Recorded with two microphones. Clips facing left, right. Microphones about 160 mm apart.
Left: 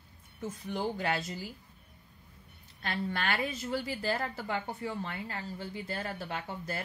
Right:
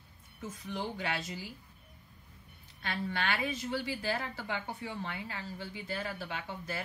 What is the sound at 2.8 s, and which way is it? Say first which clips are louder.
A woman's voice: left 1 dB; 45° left (ahead or behind).